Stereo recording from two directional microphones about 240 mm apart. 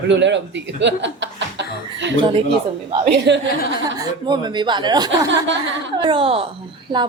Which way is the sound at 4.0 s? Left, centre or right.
Centre.